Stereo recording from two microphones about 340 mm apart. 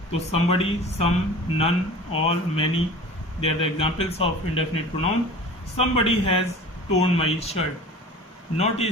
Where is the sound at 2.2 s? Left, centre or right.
Centre.